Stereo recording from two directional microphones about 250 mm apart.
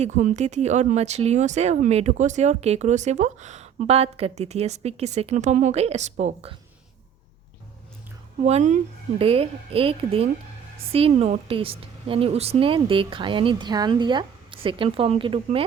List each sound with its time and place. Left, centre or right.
0.0 s speech: right
8.4 s speech: right